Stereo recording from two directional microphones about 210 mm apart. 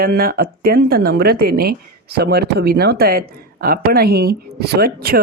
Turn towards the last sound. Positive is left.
turn(degrees=-45)  # may be behind; listen again after turning